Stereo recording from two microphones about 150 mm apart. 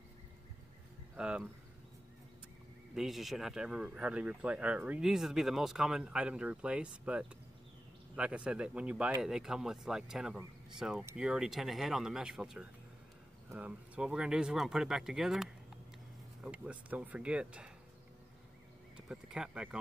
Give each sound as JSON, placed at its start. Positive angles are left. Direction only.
{"t": 1.1, "sound": "speech", "side_deg": -5}
{"t": 2.9, "sound": "speech", "side_deg": 0}
{"t": 18.9, "sound": "a sound", "side_deg": -5}